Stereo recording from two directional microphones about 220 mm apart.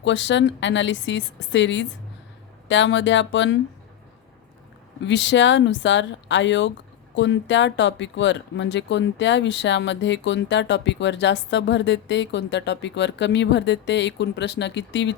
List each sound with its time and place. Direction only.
0.0 s a woman's voice: 55° left (ahead or behind)
5.0 s a woman's voice: 55° left (ahead or behind)